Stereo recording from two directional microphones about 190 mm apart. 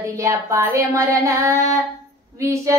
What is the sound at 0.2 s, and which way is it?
Child singing, 15° right (ahead or behind).